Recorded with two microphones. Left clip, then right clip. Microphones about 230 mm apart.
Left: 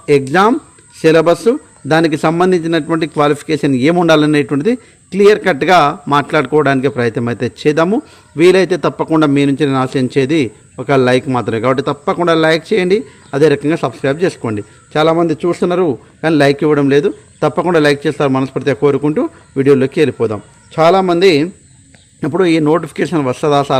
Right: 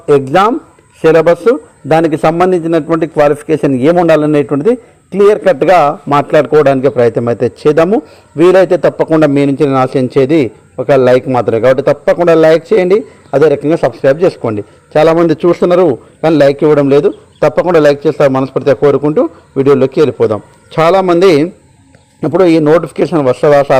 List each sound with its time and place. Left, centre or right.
0.0 s a man's voice: left